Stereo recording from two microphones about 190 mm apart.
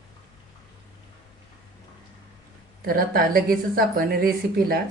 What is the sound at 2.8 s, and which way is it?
A woman's voice, 50° right (ahead or behind).